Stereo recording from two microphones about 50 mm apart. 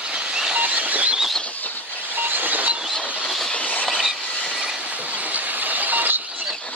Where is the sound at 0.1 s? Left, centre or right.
Centre.